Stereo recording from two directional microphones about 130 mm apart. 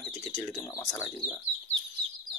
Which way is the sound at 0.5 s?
20° left (ahead or behind).